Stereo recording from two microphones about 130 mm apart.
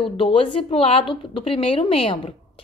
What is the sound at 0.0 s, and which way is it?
A woman's voice, 40° left (ahead or behind).